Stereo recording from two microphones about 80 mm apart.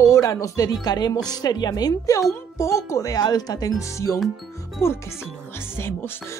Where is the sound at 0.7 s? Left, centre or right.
Left.